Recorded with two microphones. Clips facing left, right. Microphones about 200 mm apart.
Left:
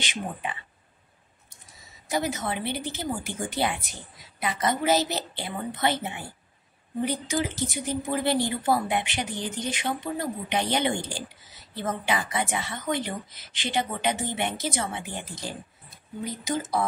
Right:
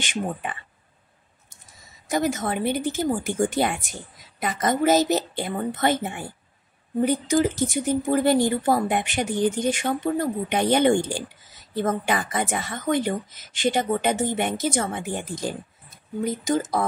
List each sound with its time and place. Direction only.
0.0 s a woman's voice: 50° right (ahead or behind)
2.0 s a woman's voice: 50° right (ahead or behind)